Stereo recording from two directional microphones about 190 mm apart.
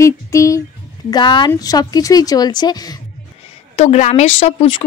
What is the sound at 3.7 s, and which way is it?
A woman's voice, 35° left (ahead or behind).